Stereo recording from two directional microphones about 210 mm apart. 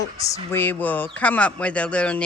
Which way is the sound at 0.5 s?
10° left (ahead or behind).